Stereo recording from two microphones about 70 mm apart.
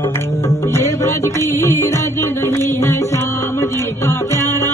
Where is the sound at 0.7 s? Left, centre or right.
Left.